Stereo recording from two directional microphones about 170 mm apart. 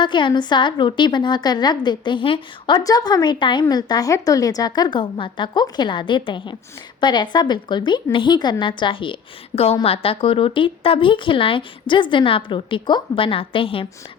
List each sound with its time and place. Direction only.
0.0 s a woman's voice: 30° left (ahead or behind)